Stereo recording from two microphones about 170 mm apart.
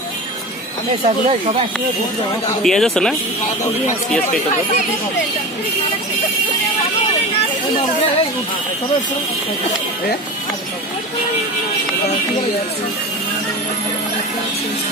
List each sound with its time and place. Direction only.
1.0 s speech: 40° right (ahead or behind)
2.6 s speech: centre (ahead or behind)